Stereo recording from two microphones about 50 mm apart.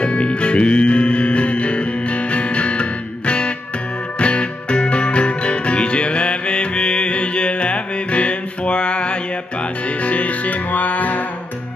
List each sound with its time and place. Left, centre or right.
0.0 s music: left